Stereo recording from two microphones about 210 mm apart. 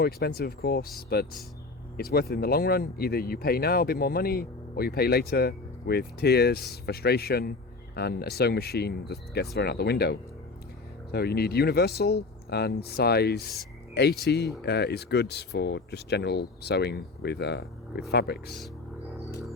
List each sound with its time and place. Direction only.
0.0 s speech: 50° left (ahead or behind)